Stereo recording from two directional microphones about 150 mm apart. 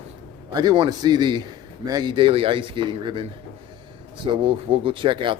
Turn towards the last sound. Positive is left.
turn(degrees=-35)  # may be behind; listen again after turning